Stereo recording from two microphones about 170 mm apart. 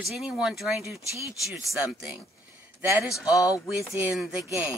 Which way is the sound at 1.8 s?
5° right (ahead or behind).